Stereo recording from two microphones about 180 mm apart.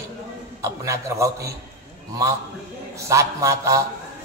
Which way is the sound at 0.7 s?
15° right (ahead or behind).